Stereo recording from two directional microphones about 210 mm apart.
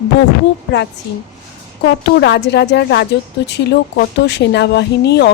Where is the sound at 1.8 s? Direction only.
55° left (ahead or behind).